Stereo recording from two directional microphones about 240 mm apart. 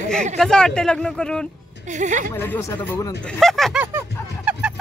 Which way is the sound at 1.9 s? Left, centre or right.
Right.